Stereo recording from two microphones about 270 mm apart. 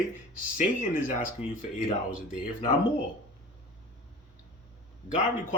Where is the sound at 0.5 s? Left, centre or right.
Left.